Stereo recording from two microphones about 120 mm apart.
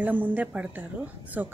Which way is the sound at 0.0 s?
15° right (ahead or behind).